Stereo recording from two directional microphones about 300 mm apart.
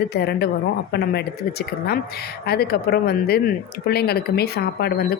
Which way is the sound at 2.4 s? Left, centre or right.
Left.